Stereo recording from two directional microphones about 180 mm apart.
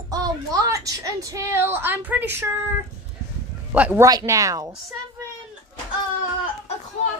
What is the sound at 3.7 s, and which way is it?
Speech, 10° right (ahead or behind).